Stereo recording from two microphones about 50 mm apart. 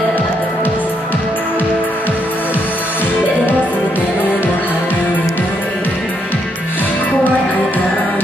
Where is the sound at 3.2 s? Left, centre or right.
Left.